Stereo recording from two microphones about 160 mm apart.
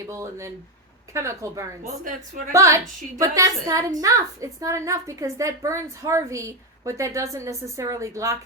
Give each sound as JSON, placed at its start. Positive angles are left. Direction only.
{"t": 0.0, "sound": "a woman's voice", "side_deg": -20}